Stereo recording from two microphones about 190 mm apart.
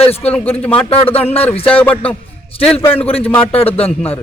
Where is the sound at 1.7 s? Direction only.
10° left (ahead or behind).